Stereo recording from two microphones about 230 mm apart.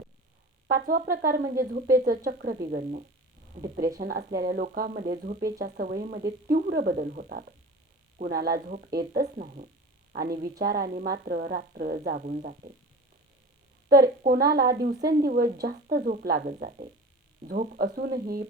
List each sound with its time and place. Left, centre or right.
0.9 s a woman's voice: right
13.8 s speech: right